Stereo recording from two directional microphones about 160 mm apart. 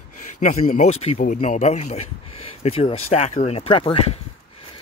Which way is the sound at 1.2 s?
55° left (ahead or behind).